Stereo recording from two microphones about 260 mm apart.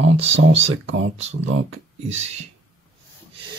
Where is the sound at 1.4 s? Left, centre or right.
Right.